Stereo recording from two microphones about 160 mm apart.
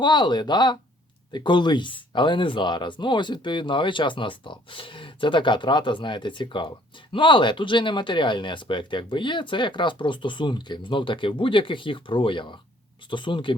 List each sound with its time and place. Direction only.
0.0 s speech: 30° left (ahead or behind)